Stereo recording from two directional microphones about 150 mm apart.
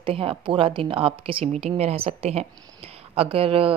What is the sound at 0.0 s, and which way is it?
A woman's voice, 35° right (ahead or behind).